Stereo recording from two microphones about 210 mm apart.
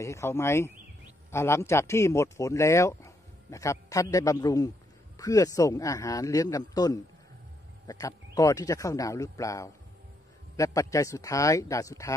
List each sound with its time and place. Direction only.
0.0 s speech: 15° left (ahead or behind)